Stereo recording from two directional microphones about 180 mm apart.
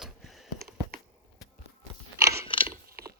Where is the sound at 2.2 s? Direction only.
15° right (ahead or behind).